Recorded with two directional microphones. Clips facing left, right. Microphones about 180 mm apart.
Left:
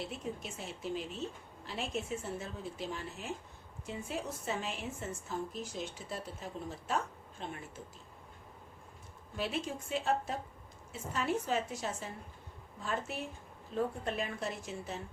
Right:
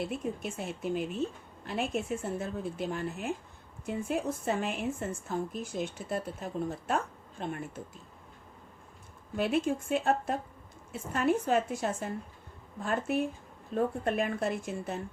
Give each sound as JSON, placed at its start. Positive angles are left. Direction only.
{"t": 0.0, "sound": "speech", "side_deg": -55}
{"t": 9.3, "sound": "speech", "side_deg": -55}